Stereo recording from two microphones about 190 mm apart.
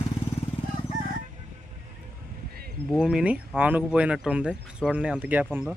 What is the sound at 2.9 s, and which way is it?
Speech, centre (ahead or behind).